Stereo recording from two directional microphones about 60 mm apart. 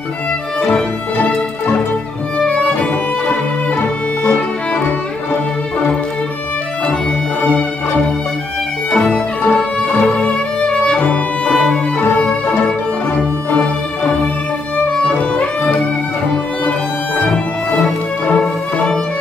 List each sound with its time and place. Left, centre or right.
2.4 s music: left
7.4 s music: left
8.9 s music: centre
9.9 s music: centre
12.0 s music: left
14.9 s music: centre
17.2 s music: left